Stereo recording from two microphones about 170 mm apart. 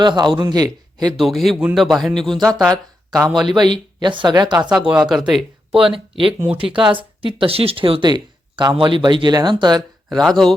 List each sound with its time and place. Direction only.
0.0 s speech: 25° right (ahead or behind)
1.2 s speech: centre (ahead or behind)
3.5 s speech: 25° right (ahead or behind)
4.9 s speech: 5° right (ahead or behind)
5.8 s speech: 30° right (ahead or behind)
10.2 s speech: 5° left (ahead or behind)